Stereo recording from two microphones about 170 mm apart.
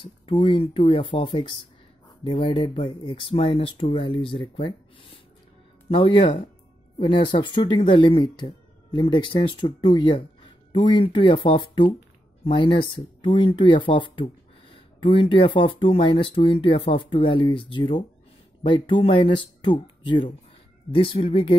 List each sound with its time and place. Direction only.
0.0 s speech: 30° left (ahead or behind)